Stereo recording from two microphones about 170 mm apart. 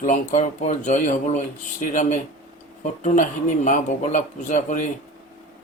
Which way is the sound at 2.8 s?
45° left (ahead or behind).